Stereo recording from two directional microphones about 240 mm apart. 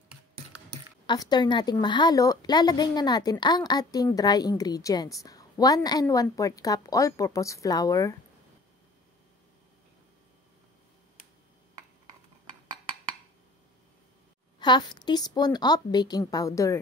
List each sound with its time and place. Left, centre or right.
1.0 s a woman's voice: centre
14.6 s a woman's voice: centre